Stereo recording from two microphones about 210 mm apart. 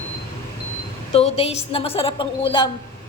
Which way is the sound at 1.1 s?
30° left (ahead or behind).